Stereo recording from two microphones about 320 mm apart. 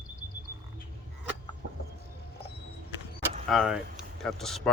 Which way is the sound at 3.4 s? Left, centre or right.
Centre.